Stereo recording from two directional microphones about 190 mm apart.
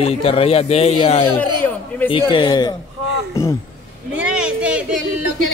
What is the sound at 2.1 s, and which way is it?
Speech, 25° left (ahead or behind).